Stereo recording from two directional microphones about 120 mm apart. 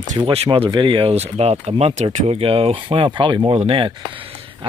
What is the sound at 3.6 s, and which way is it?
Speech, 50° right (ahead or behind).